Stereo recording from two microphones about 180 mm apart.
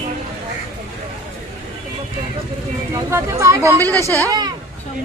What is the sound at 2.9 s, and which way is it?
Speech, 15° right (ahead or behind).